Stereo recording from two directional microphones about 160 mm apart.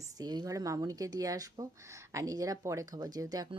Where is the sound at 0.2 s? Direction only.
25° right (ahead or behind).